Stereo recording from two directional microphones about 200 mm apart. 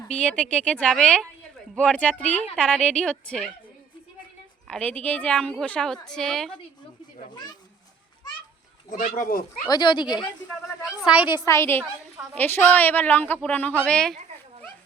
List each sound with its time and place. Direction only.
0.1 s speech: 5° left (ahead or behind)
4.7 s speech: 10° left (ahead or behind)
8.9 s speech: 45° left (ahead or behind)
9.6 s speech: 20° left (ahead or behind)
11.0 s a woman's voice: 5° right (ahead or behind)
11.3 s a woman's voice: 15° left (ahead or behind)